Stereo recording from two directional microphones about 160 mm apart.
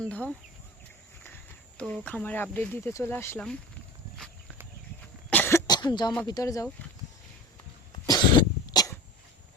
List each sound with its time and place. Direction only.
0.1 s speech: 10° left (ahead or behind)
1.8 s speech: 5° left (ahead or behind)
5.3 s cough: 15° left (ahead or behind)
6.2 s speech: 25° left (ahead or behind)
8.0 s cough: 25° left (ahead or behind)